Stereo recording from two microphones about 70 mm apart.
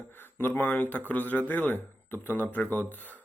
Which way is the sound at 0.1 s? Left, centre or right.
Left.